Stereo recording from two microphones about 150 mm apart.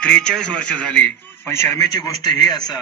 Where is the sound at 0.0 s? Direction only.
5° left (ahead or behind).